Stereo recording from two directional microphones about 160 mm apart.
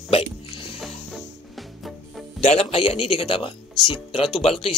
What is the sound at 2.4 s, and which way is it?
Speech, 40° left (ahead or behind).